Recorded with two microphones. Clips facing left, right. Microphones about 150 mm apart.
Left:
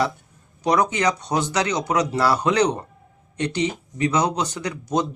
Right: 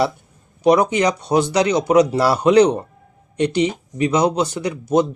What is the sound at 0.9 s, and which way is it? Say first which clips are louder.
Speech: right 5 dB; 10° right (ahead or behind).